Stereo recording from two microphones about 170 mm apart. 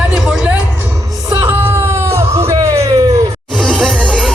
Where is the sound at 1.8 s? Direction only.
15° right (ahead or behind).